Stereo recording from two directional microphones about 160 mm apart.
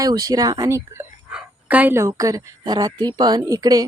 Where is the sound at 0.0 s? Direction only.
25° right (ahead or behind).